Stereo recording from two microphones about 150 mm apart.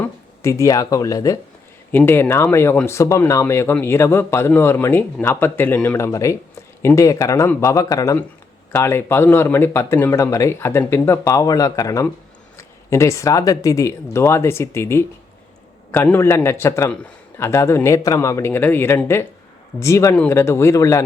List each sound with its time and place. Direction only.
0.0 s speech: 20° left (ahead or behind)
6.1 s speech: 20° left (ahead or behind)